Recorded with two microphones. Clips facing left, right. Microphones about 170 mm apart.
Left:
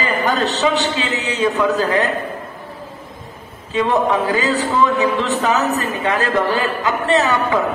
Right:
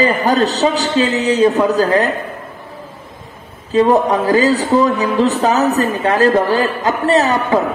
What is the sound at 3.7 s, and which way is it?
Speech, 40° right (ahead or behind).